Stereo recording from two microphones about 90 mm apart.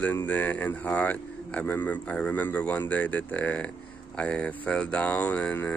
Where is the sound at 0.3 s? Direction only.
20° left (ahead or behind).